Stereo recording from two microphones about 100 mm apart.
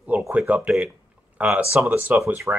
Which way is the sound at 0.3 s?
15° right (ahead or behind).